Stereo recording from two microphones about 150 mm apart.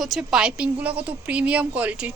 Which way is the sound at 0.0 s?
5° right (ahead or behind).